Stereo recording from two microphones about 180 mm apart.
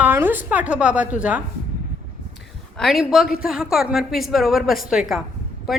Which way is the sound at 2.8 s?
Centre (ahead or behind).